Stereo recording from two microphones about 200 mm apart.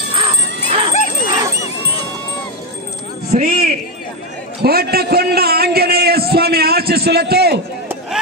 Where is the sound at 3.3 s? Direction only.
40° right (ahead or behind).